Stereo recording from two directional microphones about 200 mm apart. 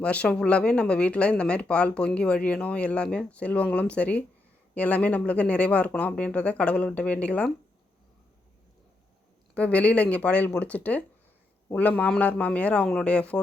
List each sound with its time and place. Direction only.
0.0 s speech: 5° left (ahead or behind)
9.6 s speech: 5° left (ahead or behind)